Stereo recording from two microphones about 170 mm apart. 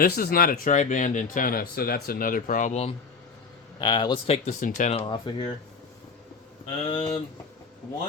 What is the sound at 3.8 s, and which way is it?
Speech, 25° left (ahead or behind).